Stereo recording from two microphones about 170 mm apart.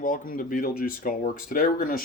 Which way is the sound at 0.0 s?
50° left (ahead or behind).